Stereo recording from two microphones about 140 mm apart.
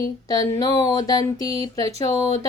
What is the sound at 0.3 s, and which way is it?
Speech, 30° left (ahead or behind).